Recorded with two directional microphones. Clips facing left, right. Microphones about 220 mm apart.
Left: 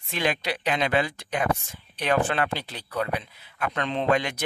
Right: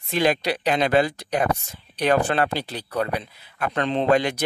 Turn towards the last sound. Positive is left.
turn(degrees=-35)  # may be behind; listen again after turning